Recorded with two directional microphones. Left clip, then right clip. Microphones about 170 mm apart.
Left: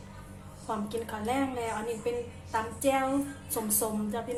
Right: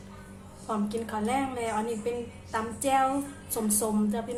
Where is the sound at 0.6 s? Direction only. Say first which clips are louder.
Right 2 dB; 15° right (ahead or behind).